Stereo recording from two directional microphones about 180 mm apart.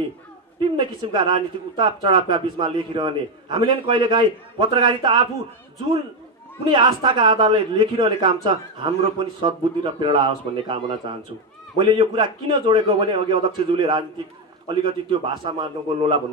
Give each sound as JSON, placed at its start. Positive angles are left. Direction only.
{"t": 0.7, "sound": "a man's voice", "side_deg": -25}
{"t": 6.7, "sound": "a man's voice", "side_deg": -25}